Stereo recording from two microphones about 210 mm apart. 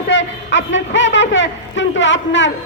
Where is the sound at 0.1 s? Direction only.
60° left (ahead or behind).